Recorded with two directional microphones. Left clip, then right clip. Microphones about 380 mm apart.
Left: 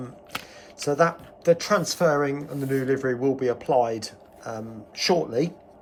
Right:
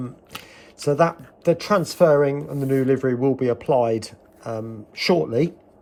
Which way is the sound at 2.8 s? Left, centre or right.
Centre.